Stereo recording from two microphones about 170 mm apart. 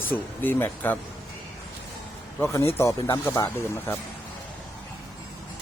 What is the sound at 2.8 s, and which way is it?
Speech, 15° left (ahead or behind).